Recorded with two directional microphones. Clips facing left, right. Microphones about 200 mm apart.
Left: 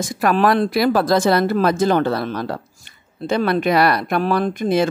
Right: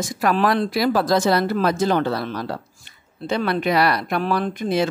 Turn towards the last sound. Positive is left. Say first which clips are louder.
# left 3 dB
turn(degrees=50)  # may be behind; listen again after turning